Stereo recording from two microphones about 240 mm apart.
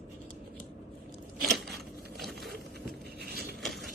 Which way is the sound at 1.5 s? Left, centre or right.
Centre.